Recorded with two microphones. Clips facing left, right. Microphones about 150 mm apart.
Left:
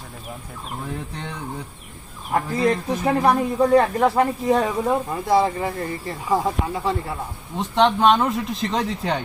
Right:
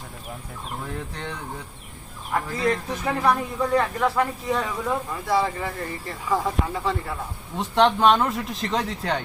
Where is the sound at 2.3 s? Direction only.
30° left (ahead or behind).